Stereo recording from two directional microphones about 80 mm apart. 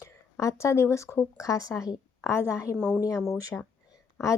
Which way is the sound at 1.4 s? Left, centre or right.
Left.